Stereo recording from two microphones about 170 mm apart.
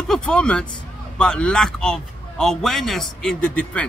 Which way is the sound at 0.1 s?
5° left (ahead or behind).